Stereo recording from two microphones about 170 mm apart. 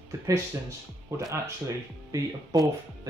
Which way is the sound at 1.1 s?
15° right (ahead or behind).